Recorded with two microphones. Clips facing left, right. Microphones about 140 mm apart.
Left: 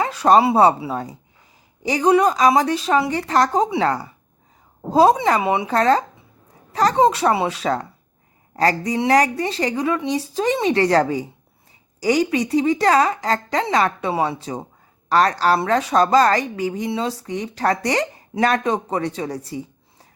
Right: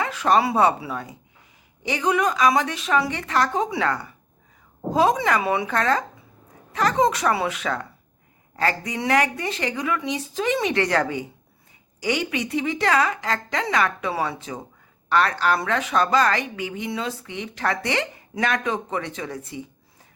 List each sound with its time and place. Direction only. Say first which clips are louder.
0.0 s a woman's voice: left 5 dB; 35° left (ahead or behind)